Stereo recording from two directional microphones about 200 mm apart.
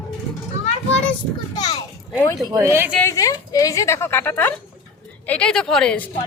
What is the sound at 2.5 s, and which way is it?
Speech, 15° right (ahead or behind).